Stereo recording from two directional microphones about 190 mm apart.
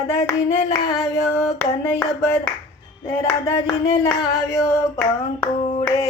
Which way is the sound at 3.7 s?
20° left (ahead or behind).